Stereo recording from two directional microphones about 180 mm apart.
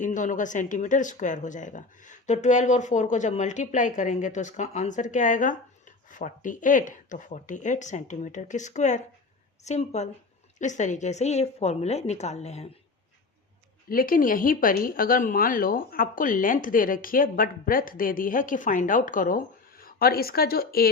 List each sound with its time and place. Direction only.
0.0 s a woman's voice: 45° left (ahead or behind)
13.9 s speech: 50° left (ahead or behind)